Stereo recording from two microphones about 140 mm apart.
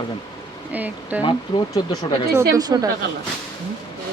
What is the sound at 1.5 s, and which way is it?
Speech, 35° left (ahead or behind).